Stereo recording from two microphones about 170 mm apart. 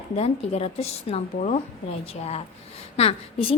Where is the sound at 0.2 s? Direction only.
35° left (ahead or behind).